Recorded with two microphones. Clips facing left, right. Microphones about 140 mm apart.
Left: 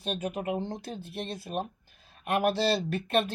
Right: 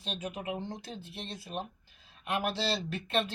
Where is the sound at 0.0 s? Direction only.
50° left (ahead or behind).